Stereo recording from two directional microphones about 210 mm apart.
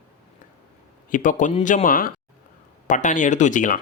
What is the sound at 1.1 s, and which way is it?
Speech, 40° left (ahead or behind).